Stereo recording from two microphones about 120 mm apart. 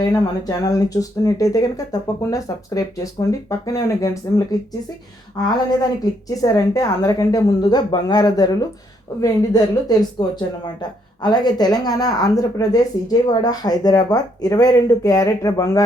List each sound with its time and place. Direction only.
0.4 s speech: 30° left (ahead or behind)